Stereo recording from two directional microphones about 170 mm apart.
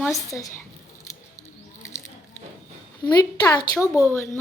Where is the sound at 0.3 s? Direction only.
20° left (ahead or behind).